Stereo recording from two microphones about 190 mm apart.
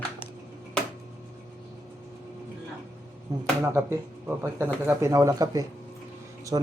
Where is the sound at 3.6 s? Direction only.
15° right (ahead or behind).